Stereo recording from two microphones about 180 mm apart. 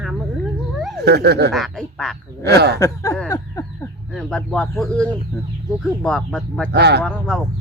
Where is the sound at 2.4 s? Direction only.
65° right (ahead or behind).